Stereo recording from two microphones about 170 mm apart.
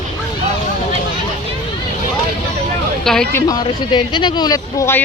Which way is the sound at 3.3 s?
20° left (ahead or behind).